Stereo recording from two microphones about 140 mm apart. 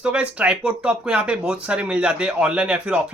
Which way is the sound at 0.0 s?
5° right (ahead or behind).